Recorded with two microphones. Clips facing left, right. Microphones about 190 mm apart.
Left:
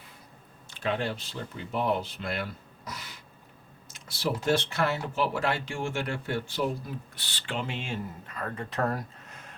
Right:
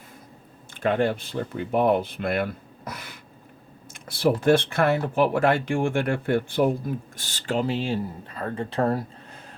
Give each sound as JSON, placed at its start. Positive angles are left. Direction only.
{"t": 0.7, "sound": "speech", "side_deg": -55}